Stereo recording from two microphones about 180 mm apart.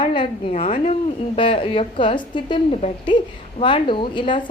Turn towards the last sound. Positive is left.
turn(degrees=25)  # may be behind; listen again after turning